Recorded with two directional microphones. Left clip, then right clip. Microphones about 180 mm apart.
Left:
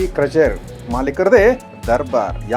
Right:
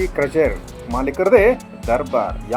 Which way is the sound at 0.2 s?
25° left (ahead or behind).